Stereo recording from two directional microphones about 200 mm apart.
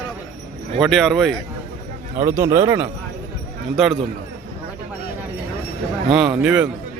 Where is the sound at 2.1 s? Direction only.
15° right (ahead or behind).